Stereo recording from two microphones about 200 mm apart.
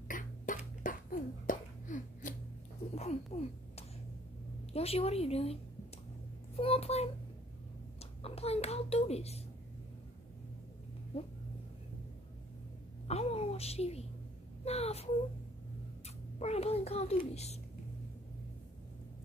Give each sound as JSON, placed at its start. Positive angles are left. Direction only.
{"t": 0.1, "sound": "a sound", "side_deg": 40}
{"t": 2.9, "sound": "speech", "side_deg": 30}
{"t": 4.7, "sound": "a child's voice", "side_deg": 30}
{"t": 8.2, "sound": "a child's voice", "side_deg": 30}
{"t": 13.1, "sound": "a sound", "side_deg": 30}
{"t": 14.6, "sound": "a child's voice", "side_deg": 30}
{"t": 16.3, "sound": "a child's voice", "side_deg": 30}